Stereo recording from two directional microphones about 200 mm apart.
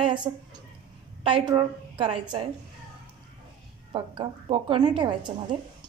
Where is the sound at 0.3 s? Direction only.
15° right (ahead or behind).